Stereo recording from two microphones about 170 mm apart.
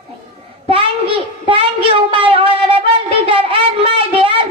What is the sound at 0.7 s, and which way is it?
Child singing, 30° right (ahead or behind).